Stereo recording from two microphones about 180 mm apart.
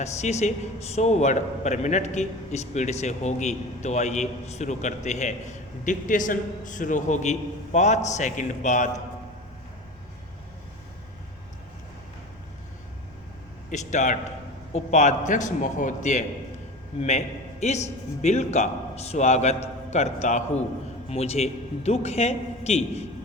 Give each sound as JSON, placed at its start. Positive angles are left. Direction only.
{"t": 0.0, "sound": "a man's voice", "side_deg": 40}
{"t": 13.7, "sound": "a man's voice", "side_deg": 40}